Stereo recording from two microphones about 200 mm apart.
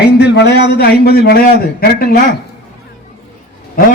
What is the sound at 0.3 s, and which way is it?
A man's voice, 55° left (ahead or behind).